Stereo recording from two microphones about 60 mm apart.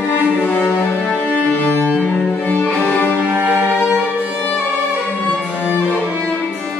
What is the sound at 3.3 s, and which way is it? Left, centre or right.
Music, right.